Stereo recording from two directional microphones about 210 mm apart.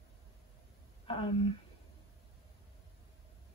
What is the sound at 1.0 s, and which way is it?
Speech, 25° left (ahead or behind).